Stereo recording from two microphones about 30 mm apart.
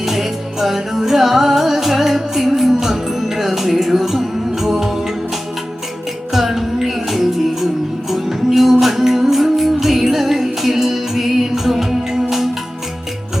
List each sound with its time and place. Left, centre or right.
0.0 s music: centre
6.3 s music: centre